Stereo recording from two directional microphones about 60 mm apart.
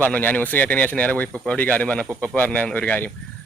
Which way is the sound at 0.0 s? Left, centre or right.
Left.